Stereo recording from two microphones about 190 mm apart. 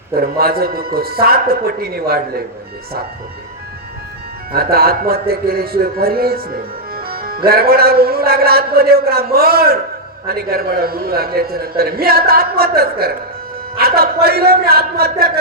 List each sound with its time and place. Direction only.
0.1 s a man's voice: 55° right (ahead or behind)
4.5 s a man's voice: 55° right (ahead or behind)